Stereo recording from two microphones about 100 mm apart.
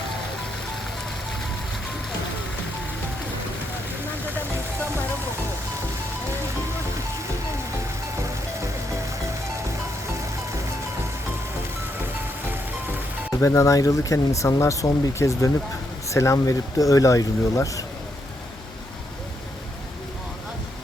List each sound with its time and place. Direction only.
13.4 s speech: 30° left (ahead or behind)